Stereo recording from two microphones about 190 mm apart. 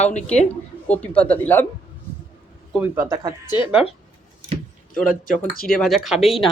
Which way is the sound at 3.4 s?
25° left (ahead or behind).